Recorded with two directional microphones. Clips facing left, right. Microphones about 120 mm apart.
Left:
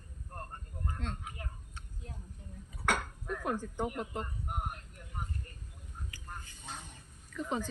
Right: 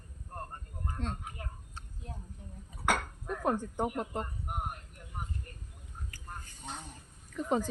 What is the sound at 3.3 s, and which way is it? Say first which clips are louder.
Speech: right 4 dB; 35° right (ahead or behind).